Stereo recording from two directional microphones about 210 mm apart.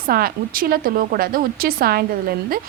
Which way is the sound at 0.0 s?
45° right (ahead or behind).